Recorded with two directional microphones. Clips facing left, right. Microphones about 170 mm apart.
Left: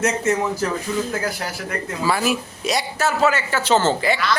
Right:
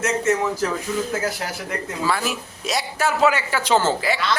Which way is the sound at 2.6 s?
Centre (ahead or behind).